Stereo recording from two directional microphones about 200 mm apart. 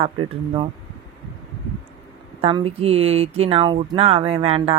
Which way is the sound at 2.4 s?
25° right (ahead or behind).